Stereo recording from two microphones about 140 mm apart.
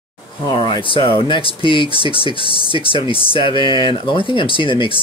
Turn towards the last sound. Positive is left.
turn(degrees=35)  # may be behind; listen again after turning